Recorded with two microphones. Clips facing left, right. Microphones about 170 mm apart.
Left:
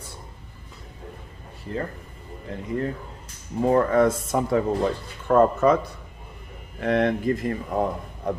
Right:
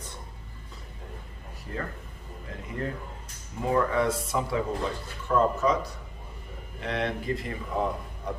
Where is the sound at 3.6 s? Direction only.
45° left (ahead or behind).